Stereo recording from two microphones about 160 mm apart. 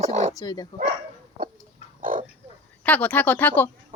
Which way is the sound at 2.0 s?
55° right (ahead or behind).